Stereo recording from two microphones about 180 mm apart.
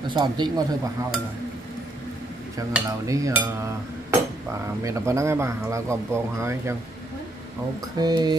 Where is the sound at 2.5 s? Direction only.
20° right (ahead or behind).